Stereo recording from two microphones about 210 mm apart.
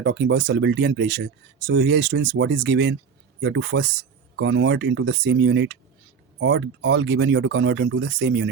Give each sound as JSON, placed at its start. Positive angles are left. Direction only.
{"t": 0.0, "sound": "speech", "side_deg": -60}